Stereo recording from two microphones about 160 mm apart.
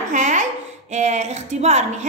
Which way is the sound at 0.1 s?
50° right (ahead or behind).